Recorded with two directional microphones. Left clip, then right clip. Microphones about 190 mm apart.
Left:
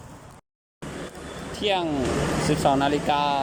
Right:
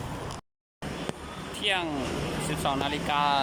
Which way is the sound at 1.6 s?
25° left (ahead or behind).